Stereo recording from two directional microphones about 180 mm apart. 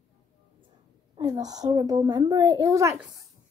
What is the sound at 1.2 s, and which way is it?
A child's voice, 20° right (ahead or behind).